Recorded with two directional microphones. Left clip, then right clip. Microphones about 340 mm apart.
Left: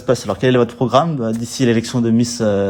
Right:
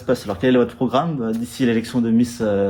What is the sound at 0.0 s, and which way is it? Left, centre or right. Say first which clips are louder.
Speech: left 3 dB; centre.